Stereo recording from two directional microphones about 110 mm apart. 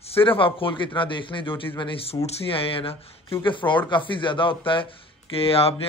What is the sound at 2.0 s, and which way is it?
A man's voice, 65° left (ahead or behind).